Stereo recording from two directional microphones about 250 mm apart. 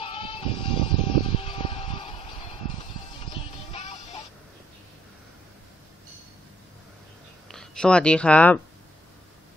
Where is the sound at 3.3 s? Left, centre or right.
Left.